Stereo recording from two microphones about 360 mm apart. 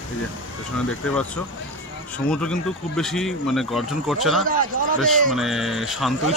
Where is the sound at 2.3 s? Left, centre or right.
Centre.